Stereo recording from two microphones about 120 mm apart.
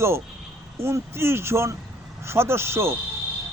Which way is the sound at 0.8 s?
25° right (ahead or behind).